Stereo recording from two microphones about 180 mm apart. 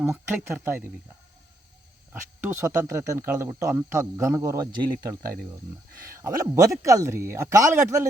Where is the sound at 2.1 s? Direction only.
15° right (ahead or behind).